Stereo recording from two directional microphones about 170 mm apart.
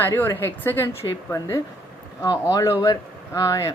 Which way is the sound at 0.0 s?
15° left (ahead or behind).